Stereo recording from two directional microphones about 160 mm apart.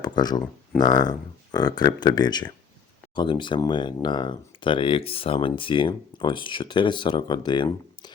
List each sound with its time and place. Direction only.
0.0 s speech: 25° left (ahead or behind)